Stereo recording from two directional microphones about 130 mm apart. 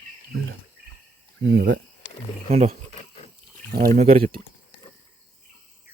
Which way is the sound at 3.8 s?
60° right (ahead or behind).